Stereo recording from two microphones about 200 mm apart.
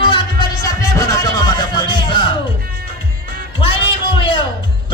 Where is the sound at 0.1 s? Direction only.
20° left (ahead or behind).